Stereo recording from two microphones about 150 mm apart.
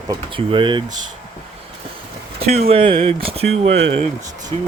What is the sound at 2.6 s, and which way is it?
Speech, 40° right (ahead or behind).